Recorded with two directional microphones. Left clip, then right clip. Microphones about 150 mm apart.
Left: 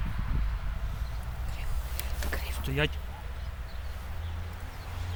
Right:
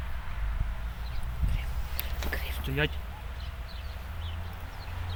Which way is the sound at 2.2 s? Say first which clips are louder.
Right 1 dB; 5° right (ahead or behind).